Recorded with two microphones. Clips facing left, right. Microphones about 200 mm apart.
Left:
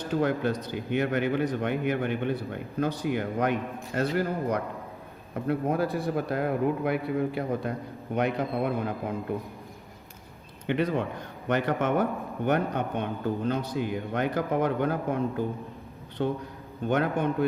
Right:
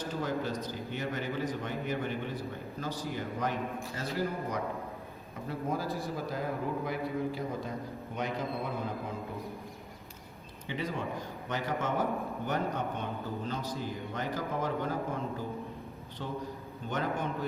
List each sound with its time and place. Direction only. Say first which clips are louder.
0.1 s speech: left 9 dB; 65° left (ahead or behind)
10.7 s speech: left 8 dB; 65° left (ahead or behind)